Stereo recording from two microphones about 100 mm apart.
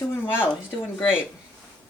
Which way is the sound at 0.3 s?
20° left (ahead or behind).